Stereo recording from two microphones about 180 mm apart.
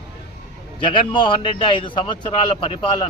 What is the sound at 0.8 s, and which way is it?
A man's voice, 25° left (ahead or behind).